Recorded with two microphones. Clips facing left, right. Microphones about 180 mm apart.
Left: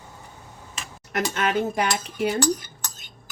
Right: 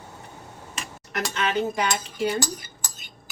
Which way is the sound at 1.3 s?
50° left (ahead or behind).